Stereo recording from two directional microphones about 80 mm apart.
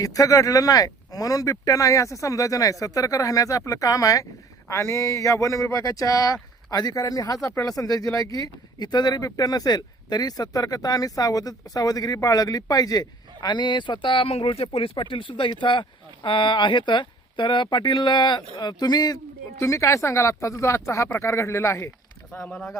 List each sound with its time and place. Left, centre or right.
0.0 s speech: left
19.5 s speech: left
22.3 s speech: left
22.5 s a man's voice: centre